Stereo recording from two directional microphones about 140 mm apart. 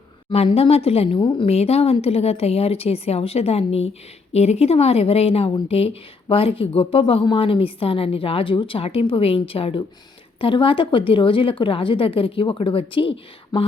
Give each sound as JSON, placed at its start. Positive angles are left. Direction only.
{"t": 0.3, "sound": "a woman's voice", "side_deg": 40}